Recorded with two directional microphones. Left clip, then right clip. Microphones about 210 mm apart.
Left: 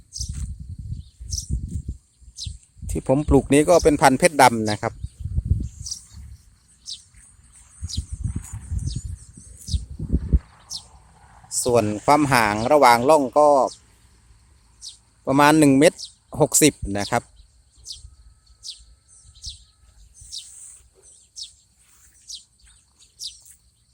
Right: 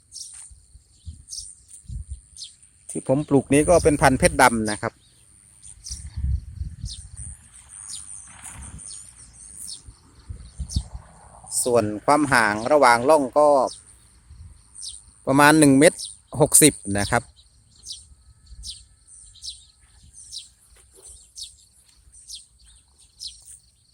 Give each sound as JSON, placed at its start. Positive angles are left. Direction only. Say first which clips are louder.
{"t": 0.1, "sound": "insect", "louder": "left 5 dB", "side_deg": 15}
{"t": 2.3, "sound": "speech", "louder": "left 4 dB", "side_deg": 15}
{"t": 11.2, "sound": "a sound", "louder": "right 2 dB", "side_deg": 50}
{"t": 11.6, "sound": "speech", "louder": "left 1 dB", "side_deg": 10}
{"t": 15.2, "sound": "speech", "louder": "even", "side_deg": 0}
{"t": 19.3, "sound": "bird", "louder": "right 1 dB", "side_deg": -10}
{"t": 22.3, "sound": "bird", "louder": "left 2 dB", "side_deg": 0}